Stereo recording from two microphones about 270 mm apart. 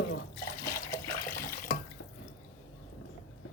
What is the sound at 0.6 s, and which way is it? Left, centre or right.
Water, centre.